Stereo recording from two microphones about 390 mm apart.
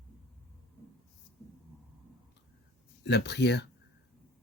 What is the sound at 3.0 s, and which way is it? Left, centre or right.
Speech, left.